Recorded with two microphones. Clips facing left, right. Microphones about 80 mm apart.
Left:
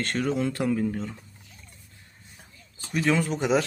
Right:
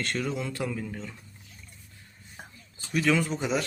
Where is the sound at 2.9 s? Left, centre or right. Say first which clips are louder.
Left 1 dB; left.